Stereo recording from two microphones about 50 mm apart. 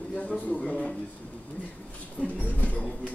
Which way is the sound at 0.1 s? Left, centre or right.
Left.